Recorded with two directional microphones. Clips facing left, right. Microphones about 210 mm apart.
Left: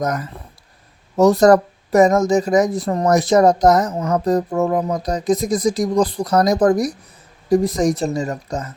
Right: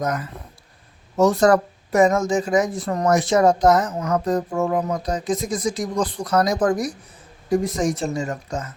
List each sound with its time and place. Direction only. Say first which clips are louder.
0.0 s speech: left 3 dB; 40° left (ahead or behind)